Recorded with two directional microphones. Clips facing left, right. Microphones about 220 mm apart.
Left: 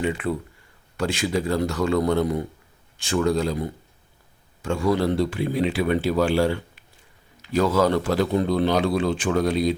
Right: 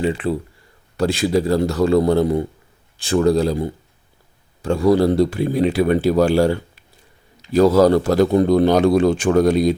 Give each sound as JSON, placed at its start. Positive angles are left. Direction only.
{"t": 0.0, "sound": "a man's voice", "side_deg": -30}